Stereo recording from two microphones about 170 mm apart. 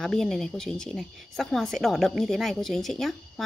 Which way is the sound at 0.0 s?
Centre (ahead or behind).